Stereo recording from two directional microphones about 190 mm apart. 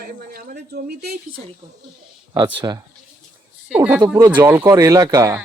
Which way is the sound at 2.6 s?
15° right (ahead or behind).